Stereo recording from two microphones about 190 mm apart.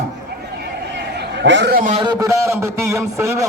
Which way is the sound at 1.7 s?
40° right (ahead or behind).